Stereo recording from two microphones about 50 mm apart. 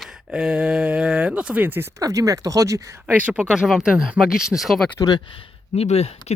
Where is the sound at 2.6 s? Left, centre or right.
Right.